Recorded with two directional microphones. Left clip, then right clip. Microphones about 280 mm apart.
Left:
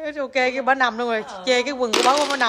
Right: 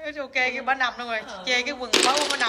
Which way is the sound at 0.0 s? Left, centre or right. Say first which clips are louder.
Left 4 dB; centre.